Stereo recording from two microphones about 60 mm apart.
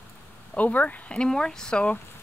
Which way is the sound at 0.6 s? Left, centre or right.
Left.